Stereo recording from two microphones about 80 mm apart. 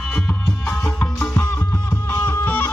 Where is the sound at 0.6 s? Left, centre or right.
Centre.